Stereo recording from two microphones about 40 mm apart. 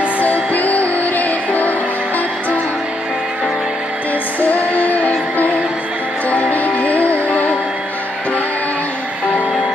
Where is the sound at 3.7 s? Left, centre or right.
Right.